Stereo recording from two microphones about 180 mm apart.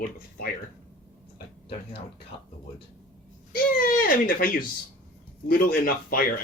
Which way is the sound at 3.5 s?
50° left (ahead or behind).